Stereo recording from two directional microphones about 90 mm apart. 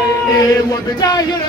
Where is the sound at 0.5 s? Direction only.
45° left (ahead or behind).